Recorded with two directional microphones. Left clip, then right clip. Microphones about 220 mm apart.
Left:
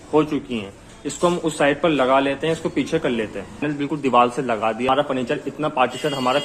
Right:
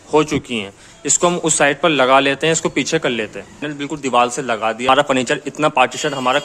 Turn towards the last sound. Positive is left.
turn(degrees=-20)  # may be behind; listen again after turning